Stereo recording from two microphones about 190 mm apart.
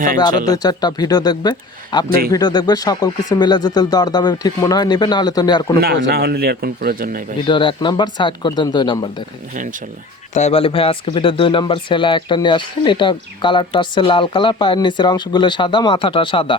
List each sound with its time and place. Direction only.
0.4 s speech: 20° left (ahead or behind)
2.0 s speech: 50° right (ahead or behind)
2.3 s speech: 20° left (ahead or behind)
5.8 s a man's voice: 55° right (ahead or behind)
7.4 s speech: 25° left (ahead or behind)
10.3 s speech: 35° left (ahead or behind)